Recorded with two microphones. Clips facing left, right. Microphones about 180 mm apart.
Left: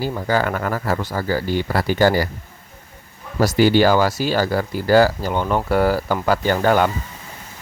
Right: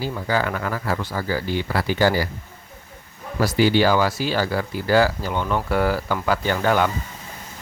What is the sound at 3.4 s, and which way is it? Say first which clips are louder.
Speech: left 3 dB; 45° left (ahead or behind).